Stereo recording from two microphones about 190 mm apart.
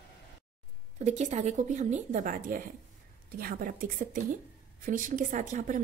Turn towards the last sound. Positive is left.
turn(degrees=-40)  # may be behind; listen again after turning